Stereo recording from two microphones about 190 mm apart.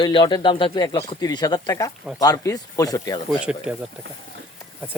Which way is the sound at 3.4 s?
5° right (ahead or behind).